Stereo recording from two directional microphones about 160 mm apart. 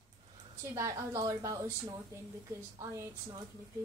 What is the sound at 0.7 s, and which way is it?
A woman's voice, 20° right (ahead or behind).